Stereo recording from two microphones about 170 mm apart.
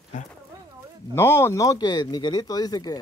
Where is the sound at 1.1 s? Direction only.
15° left (ahead or behind).